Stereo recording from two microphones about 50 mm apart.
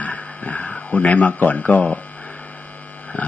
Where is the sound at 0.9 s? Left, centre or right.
Left.